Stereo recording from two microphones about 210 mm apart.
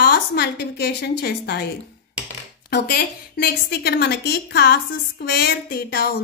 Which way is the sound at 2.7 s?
45° left (ahead or behind).